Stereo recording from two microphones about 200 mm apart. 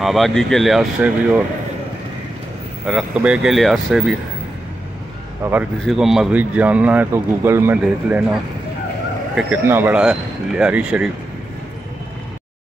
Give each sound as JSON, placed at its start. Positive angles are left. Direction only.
{"t": 0.0, "sound": "speech", "side_deg": 0}
{"t": 2.9, "sound": "speech", "side_deg": -5}
{"t": 5.4, "sound": "speech", "side_deg": -10}
{"t": 9.3, "sound": "speech", "side_deg": -10}